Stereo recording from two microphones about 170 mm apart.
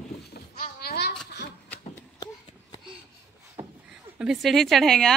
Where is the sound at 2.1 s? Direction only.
25° left (ahead or behind).